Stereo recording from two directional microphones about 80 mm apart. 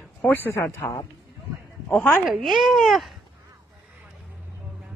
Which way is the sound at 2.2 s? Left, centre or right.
Centre.